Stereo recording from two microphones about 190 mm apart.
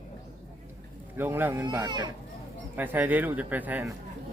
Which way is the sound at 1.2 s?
10° right (ahead or behind).